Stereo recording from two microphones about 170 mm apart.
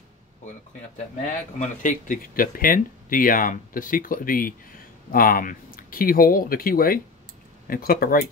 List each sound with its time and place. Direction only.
1.6 s speech: 50° left (ahead or behind)